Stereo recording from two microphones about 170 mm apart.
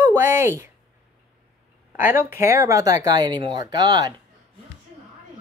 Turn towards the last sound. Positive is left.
turn(degrees=-25)  # may be behind; listen again after turning